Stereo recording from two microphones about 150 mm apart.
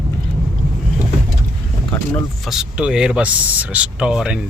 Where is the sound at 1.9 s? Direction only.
5° left (ahead or behind).